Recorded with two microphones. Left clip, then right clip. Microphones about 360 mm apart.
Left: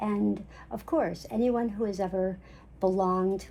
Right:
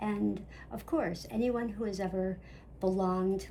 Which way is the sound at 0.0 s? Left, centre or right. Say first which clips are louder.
Left 4 dB; centre.